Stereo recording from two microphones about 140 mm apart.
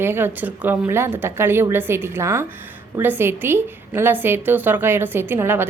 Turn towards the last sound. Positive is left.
turn(degrees=-15)  # may be behind; listen again after turning